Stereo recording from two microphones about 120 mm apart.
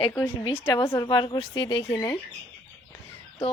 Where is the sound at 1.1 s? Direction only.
40° left (ahead or behind).